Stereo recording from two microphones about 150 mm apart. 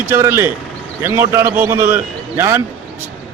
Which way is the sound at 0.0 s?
15° right (ahead or behind).